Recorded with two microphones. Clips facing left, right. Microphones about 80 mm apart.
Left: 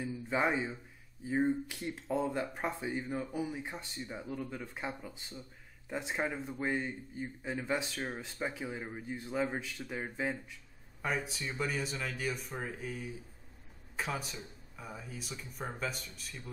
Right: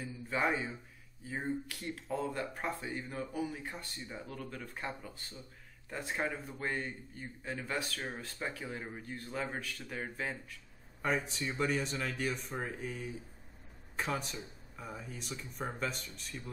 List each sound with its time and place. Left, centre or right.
0.0 s a sound: centre
1.3 s a man's voice: centre
11.0 s speech: centre